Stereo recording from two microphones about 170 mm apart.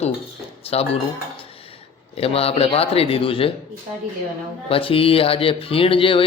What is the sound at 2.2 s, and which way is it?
Speech, 35° left (ahead or behind).